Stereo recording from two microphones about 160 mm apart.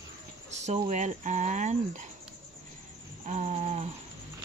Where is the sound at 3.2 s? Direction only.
45° right (ahead or behind).